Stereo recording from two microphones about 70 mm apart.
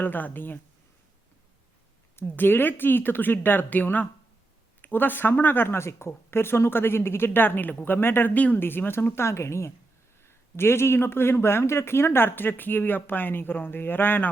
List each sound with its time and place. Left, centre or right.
0.0 s speech: left
2.1 s speech: left